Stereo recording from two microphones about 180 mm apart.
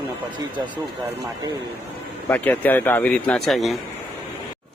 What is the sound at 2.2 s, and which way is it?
A man's voice, 10° left (ahead or behind).